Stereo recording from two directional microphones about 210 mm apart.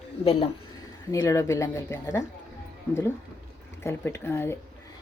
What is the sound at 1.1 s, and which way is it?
A woman's voice, 15° left (ahead or behind).